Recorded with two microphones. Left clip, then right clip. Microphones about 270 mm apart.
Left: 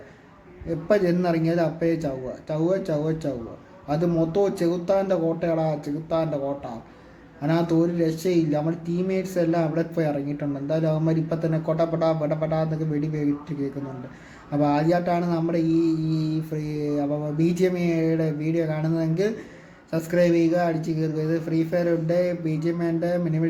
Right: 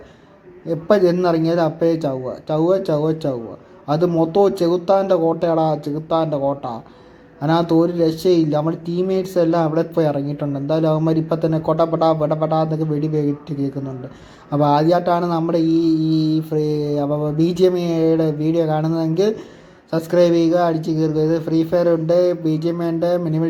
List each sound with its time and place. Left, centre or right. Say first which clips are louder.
0.9 s a man's voice: right 6 dB; centre
14.5 s a man's voice: right 7 dB; centre
15.6 s mantra: right 4 dB; centre
15.9 s a man's voice: right 8 dB; centre
16.1 s mantra: right 9 dB; centre
16.7 s a man's voice: right 6 dB; centre